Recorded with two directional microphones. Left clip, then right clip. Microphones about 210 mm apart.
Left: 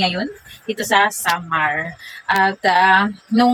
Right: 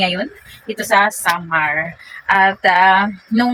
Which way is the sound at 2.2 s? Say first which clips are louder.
Right 3 dB; 10° left (ahead or behind).